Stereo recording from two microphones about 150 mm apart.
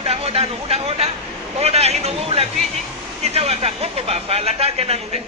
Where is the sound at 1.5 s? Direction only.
45° right (ahead or behind).